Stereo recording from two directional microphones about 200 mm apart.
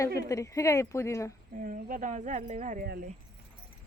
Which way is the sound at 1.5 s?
40° right (ahead or behind).